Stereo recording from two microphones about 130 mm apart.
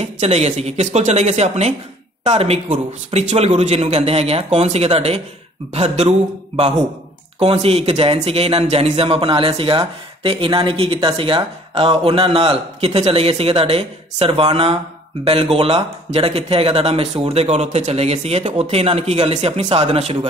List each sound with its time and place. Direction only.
0.0 s a man's voice: 55° right (ahead or behind)